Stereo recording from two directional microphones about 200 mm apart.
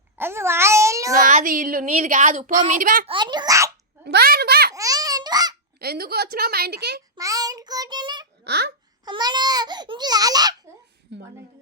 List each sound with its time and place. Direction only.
0.2 s cat: 10° right (ahead or behind)
1.2 s a child's voice: 45° right (ahead or behind)
3.1 s speech: 20° right (ahead or behind)
4.0 s speech: 50° right (ahead or behind)
4.7 s babbling: 15° right (ahead or behind)
5.8 s speech: 50° right (ahead or behind)
7.2 s child singing: 15° right (ahead or behind)
8.4 s speech: 55° right (ahead or behind)
9.0 s speech: 20° right (ahead or behind)